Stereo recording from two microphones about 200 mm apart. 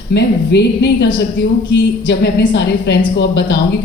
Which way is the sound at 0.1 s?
60° left (ahead or behind).